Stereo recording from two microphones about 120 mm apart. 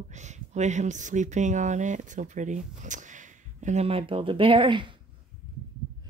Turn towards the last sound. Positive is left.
turn(degrees=-45)  # may be behind; listen again after turning